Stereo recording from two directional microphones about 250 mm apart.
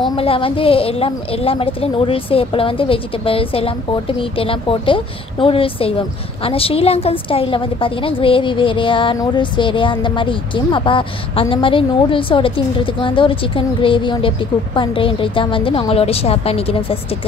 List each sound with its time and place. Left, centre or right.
0.1 s a woman's voice: left